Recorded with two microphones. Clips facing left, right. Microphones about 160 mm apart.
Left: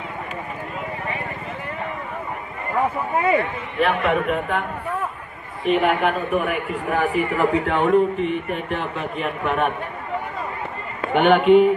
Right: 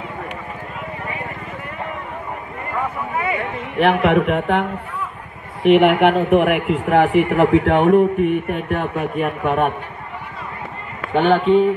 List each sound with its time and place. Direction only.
3.8 s a man's voice: 75° right (ahead or behind); by 9.7 s 50° right (ahead or behind)
11.1 s speech: 30° right (ahead or behind)